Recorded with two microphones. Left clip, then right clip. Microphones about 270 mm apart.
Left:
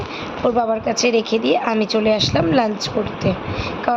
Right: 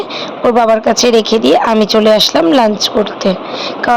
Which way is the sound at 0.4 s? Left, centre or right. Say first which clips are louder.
Right 9 dB; centre.